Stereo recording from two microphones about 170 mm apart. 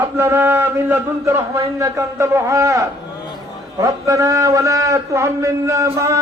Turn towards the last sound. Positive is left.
turn(degrees=-15)  # may be behind; listen again after turning